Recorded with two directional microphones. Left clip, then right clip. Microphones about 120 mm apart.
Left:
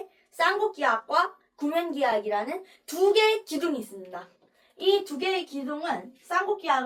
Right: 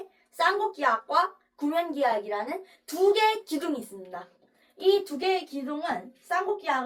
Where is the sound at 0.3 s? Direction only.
20° left (ahead or behind).